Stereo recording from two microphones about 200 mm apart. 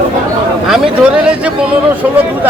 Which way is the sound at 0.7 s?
5° right (ahead or behind).